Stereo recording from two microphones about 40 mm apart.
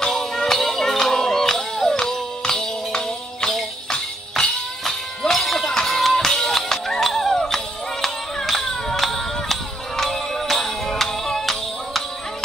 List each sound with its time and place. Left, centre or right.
0.1 s music: centre
5.3 s music: centre